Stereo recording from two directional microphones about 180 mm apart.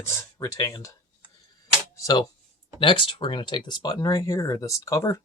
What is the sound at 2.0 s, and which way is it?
Speech, 20° left (ahead or behind).